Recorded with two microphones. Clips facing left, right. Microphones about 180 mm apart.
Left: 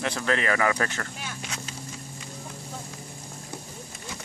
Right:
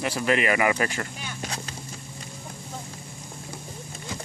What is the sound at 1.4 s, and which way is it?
Boat, 45° right (ahead or behind).